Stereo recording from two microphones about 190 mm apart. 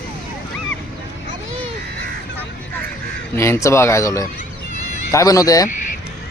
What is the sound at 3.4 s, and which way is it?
A man's voice, 15° left (ahead or behind).